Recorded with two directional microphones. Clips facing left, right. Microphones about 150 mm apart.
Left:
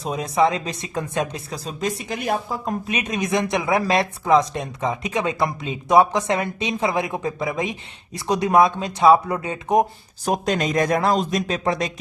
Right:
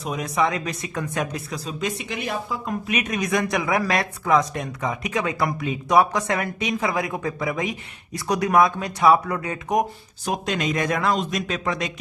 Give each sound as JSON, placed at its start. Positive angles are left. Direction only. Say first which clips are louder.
{"t": 0.0, "sound": "speech", "louder": "left 4 dB", "side_deg": 30}
{"t": 10.2, "sound": "speech", "louder": "left 3 dB", "side_deg": 40}